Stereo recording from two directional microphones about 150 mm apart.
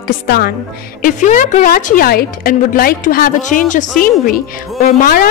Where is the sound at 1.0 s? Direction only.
55° left (ahead or behind).